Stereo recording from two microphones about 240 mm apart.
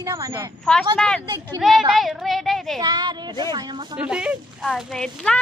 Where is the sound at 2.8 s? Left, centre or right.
Centre.